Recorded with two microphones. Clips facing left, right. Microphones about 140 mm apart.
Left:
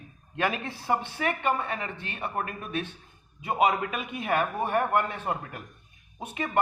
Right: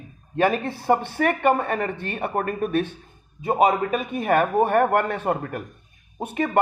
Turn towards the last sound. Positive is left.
turn(degrees=-50)  # may be behind; listen again after turning